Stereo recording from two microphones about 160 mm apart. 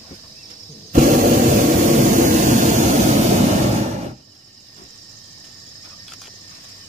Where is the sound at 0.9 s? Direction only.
55° right (ahead or behind).